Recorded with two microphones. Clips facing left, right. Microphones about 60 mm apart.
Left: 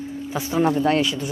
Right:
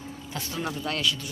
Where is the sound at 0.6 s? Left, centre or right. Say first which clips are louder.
Left 14 dB; left.